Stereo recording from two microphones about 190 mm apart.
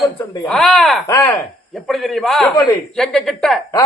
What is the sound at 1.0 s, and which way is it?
Speech, 15° left (ahead or behind).